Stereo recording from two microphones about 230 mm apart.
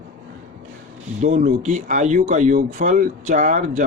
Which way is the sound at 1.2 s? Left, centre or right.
Right.